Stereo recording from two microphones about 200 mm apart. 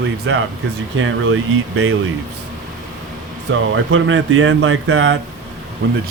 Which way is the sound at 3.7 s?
80° right.